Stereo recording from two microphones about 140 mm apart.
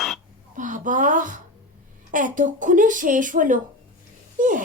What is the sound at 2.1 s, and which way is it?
Speech, 65° right (ahead or behind).